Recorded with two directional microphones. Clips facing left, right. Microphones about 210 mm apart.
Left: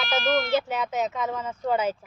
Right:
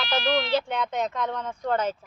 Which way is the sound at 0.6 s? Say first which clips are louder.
Left 1 dB; 5° left (ahead or behind).